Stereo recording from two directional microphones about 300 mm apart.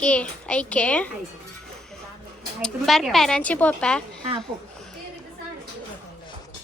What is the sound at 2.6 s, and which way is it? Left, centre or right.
A woman's voice, centre.